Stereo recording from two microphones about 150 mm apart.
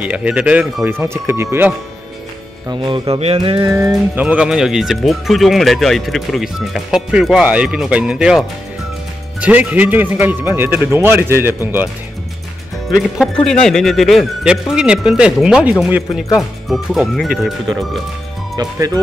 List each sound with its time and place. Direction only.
0.0 s speech: 10° right (ahead or behind)
2.7 s speech: 35° right (ahead or behind)
3.9 s speech: 10° right (ahead or behind)
13.5 s speech: 5° left (ahead or behind)
18.6 s speech: 25° right (ahead or behind)